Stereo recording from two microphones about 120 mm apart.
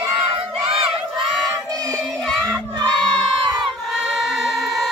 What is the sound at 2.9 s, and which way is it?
Crowd, 5° left (ahead or behind).